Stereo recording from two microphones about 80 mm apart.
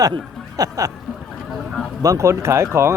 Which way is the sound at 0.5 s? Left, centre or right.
Right.